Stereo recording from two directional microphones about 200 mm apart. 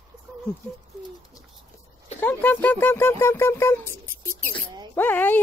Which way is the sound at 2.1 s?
10° left (ahead or behind).